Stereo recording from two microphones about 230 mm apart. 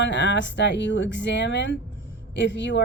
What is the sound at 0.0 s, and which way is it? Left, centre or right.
A woman's voice, left.